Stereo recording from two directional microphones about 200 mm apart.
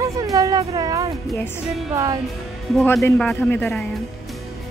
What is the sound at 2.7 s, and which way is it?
Speech, centre (ahead or behind).